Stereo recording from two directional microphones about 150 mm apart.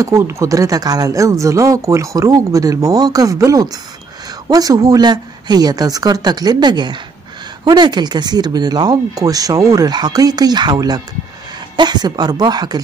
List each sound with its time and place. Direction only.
0.0 s speech: 20° right (ahead or behind)